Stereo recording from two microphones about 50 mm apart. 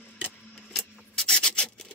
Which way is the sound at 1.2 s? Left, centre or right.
Centre.